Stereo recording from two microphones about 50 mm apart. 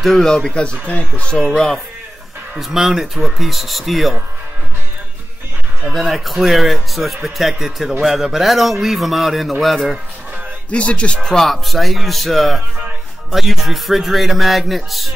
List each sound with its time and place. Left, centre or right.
0.0 s speech: centre; by 1.4 s left
1.4 s speech: centre
2.6 s a man's voice: centre
5.9 s a man's voice: centre
10.7 s speech: left
11.1 s a man's voice: centre